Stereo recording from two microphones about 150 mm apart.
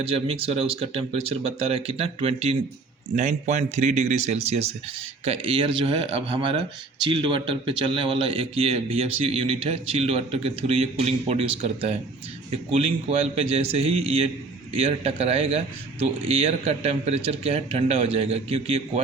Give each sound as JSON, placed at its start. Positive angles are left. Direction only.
{"t": 0.0, "sound": "a man's voice", "side_deg": -40}